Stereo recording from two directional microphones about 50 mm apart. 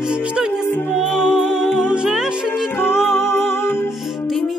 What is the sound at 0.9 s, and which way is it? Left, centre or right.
Music, centre.